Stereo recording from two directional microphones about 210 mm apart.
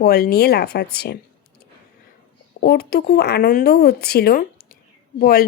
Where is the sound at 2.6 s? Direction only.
50° left (ahead or behind).